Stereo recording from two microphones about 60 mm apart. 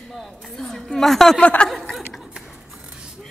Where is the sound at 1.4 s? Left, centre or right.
Left.